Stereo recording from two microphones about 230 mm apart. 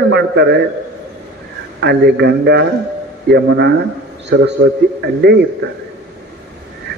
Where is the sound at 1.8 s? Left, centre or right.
Right.